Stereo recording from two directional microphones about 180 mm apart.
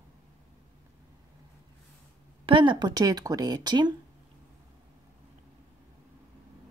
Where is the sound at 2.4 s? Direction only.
25° right (ahead or behind).